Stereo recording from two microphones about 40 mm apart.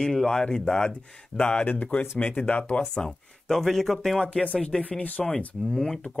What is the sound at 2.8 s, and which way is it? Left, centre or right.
Speech, left.